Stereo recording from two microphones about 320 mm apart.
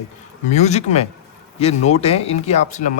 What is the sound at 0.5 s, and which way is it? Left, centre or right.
Speech, left.